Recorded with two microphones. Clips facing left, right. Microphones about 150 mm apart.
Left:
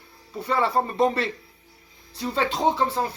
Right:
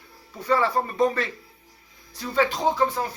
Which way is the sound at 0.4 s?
25° left (ahead or behind).